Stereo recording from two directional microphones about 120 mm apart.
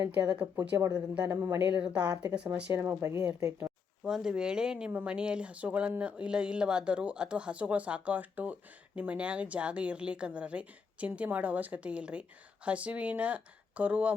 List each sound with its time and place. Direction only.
0.3 s speech: 15° right (ahead or behind)
0.8 s speech: 25° right (ahead or behind)
1.8 s speech: 10° right (ahead or behind)
4.0 s speech: 5° right (ahead or behind)